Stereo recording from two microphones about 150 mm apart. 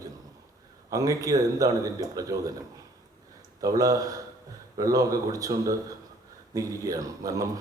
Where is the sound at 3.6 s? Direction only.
25° right (ahead or behind).